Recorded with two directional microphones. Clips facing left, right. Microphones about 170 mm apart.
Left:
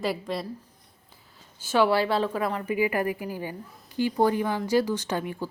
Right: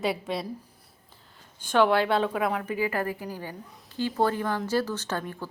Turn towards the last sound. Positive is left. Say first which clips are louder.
# left 3 dB
turn(degrees=10)  # may be behind; listen again after turning